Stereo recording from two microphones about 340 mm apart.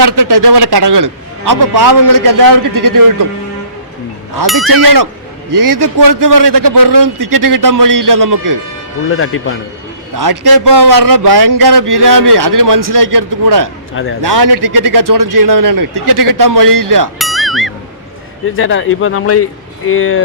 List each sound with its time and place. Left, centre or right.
0.2 s a man's voice: right
5.5 s a man's voice: right
9.0 s speech: left
10.2 s a man's voice: right
13.9 s speech: left
14.2 s a man's voice: right
17.2 s music: centre
18.5 s speech: left